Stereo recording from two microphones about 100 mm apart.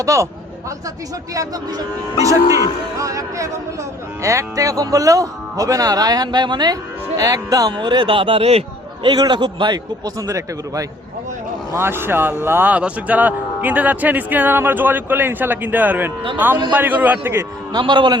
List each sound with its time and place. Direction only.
0.0 s speech: 30° right (ahead or behind)
2.1 s speech: 30° right (ahead or behind)
7.2 s speech: 35° right (ahead or behind); by 8.6 s 85° right
9.0 s speech: 45° right (ahead or behind)
10.2 s speech: 35° right (ahead or behind)
11.7 s a man's voice: 25° right (ahead or behind)
17.7 s speech: 50° right (ahead or behind)